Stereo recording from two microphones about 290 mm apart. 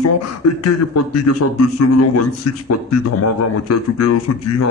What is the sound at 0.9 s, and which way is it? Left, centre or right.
A man's voice, left.